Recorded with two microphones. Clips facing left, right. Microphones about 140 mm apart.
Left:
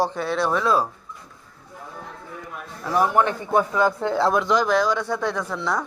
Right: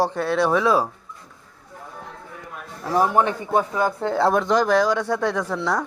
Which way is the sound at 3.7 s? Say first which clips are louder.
Left 1 dB; 40° right (ahead or behind).